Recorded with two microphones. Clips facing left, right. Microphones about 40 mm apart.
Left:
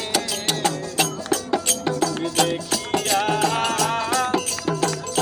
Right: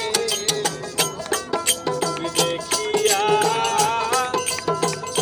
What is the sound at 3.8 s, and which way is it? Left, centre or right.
Music, centre.